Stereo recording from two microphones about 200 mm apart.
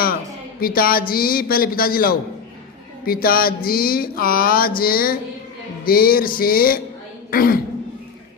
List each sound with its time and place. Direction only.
0.6 s music: 50° left (ahead or behind)
7.3 s speech: 45° left (ahead or behind)